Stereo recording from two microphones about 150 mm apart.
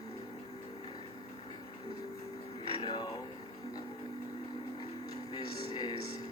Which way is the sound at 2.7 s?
30° left (ahead or behind).